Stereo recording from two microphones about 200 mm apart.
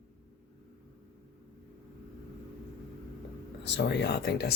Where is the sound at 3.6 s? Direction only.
60° left (ahead or behind).